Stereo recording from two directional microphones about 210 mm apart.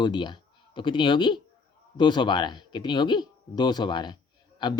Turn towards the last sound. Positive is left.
turn(degrees=20)  # may be behind; listen again after turning